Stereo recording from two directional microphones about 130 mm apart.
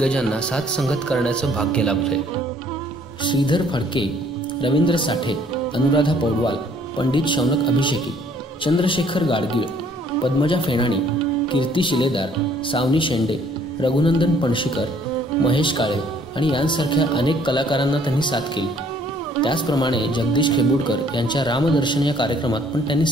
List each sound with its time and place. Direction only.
0.0 s a man's voice: 5° left (ahead or behind)
3.3 s speech: 40° left (ahead or behind)